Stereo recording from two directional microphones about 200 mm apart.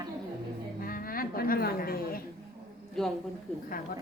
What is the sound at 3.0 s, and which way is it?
Speech, centre (ahead or behind).